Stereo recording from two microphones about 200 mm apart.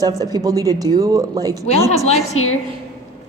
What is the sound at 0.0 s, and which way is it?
Speech, 20° right (ahead or behind).